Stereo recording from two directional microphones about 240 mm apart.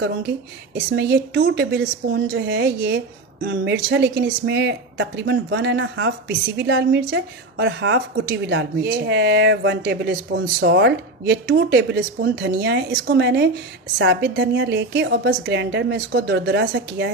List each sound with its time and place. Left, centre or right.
0.7 s speech: right